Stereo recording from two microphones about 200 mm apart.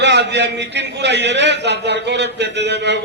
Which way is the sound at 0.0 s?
55° right (ahead or behind).